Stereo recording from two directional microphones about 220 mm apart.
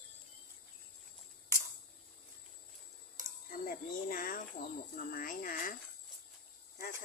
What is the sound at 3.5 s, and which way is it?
Cricket, 40° left (ahead or behind).